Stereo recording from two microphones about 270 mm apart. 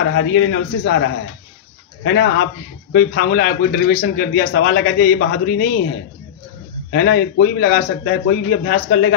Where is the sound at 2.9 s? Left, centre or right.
Left.